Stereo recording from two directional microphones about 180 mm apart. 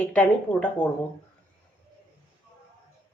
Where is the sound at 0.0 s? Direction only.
5° left (ahead or behind).